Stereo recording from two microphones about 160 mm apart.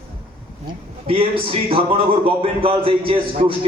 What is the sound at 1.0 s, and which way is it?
A man's voice, 35° right (ahead or behind).